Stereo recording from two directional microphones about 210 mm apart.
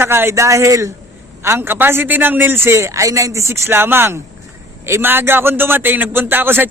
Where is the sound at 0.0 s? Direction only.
10° right (ahead or behind).